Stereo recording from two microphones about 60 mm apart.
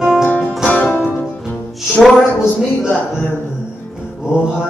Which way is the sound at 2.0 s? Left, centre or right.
Centre.